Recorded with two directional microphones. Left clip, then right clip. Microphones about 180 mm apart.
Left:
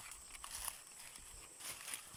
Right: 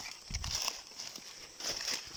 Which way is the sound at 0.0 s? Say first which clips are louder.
Right 10 dB; 30° right (ahead or behind).